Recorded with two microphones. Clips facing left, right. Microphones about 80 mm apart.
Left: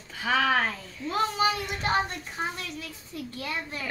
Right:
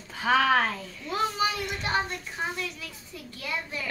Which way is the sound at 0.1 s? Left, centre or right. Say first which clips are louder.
Right 2 dB; centre.